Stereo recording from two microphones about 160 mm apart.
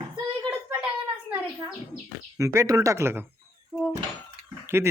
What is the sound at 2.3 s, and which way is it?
Speech, 20° right (ahead or behind).